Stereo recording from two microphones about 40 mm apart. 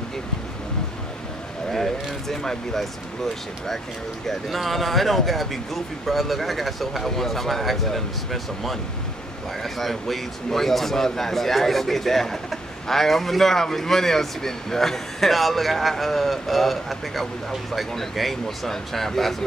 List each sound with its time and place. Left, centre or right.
1.7 s a man's voice: centre
4.3 s a man's voice: centre